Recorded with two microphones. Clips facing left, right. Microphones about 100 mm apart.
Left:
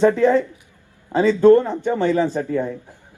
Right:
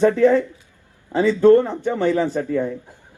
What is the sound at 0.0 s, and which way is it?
Speech, 20° left (ahead or behind).